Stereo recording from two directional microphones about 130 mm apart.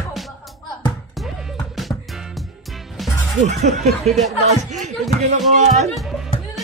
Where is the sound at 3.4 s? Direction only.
65° right (ahead or behind).